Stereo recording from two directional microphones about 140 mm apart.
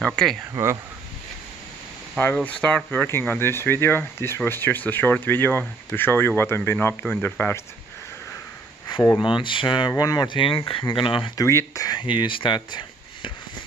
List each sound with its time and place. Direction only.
0.0 s speech: 5° left (ahead or behind)
2.1 s speech: 10° left (ahead or behind)
8.9 s a sound: 35° left (ahead or behind)
9.2 s speech: 35° left (ahead or behind)
11.4 s speech: 20° left (ahead or behind)